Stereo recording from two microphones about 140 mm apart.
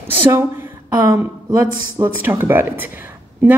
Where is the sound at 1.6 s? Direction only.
15° right (ahead or behind).